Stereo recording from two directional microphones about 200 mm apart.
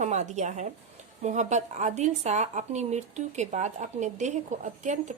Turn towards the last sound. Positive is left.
turn(degrees=-35)  # may be behind; listen again after turning